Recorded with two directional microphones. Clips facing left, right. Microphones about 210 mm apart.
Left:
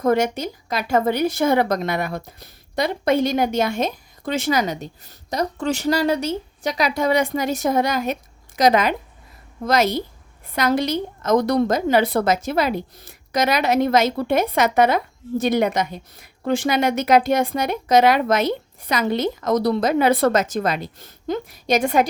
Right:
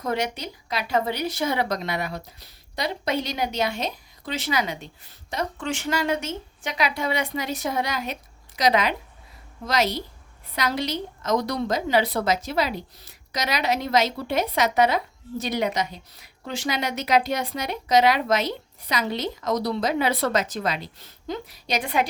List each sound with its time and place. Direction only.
0.0 s a woman's voice: 50° left (ahead or behind)